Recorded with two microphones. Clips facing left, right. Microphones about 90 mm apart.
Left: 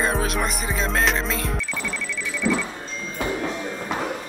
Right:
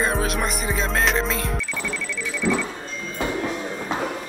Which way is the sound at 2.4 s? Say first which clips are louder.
Even; 20° right (ahead or behind).